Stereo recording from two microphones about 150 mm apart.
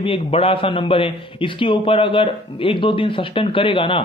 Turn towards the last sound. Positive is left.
turn(degrees=35)  # may be behind; listen again after turning